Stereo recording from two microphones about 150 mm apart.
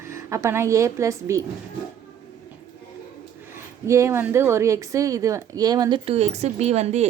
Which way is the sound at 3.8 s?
20° right (ahead or behind).